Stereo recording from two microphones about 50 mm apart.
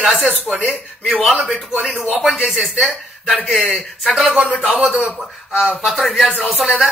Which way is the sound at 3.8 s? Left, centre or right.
Centre.